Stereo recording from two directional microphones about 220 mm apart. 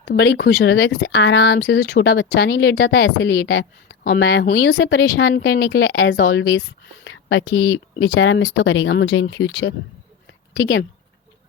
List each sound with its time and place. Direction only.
0.0 s speech: 50° left (ahead or behind)
7.0 s a sound: 55° left (ahead or behind)
7.7 s speech: 55° left (ahead or behind)